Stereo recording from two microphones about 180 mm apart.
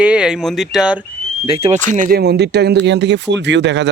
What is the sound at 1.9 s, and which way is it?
Speech, 50° right (ahead or behind).